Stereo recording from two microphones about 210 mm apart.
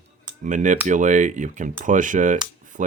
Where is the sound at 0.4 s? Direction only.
35° right (ahead or behind).